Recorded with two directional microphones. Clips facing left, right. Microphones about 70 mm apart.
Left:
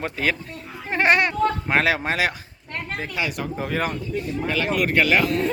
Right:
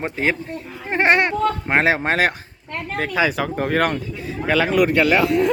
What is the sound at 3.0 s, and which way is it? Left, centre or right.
Speech, right.